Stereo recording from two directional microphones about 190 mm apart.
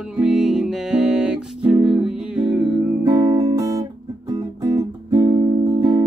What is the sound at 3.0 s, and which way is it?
Music, 20° right (ahead or behind).